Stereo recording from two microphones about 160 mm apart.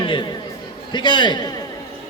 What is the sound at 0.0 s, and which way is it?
A man's voice, 30° left (ahead or behind).